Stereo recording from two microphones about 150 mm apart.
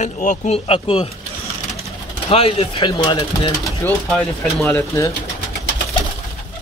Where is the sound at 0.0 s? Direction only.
55° left (ahead or behind).